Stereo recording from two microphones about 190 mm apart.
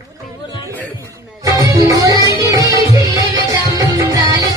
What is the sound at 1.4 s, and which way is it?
Music, 15° right (ahead or behind).